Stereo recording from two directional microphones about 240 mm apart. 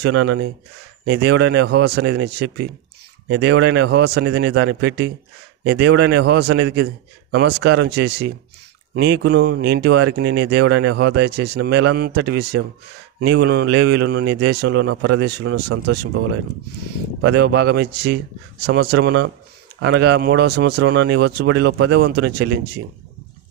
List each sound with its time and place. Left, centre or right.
0.0 s speech: right
17.2 s speech: right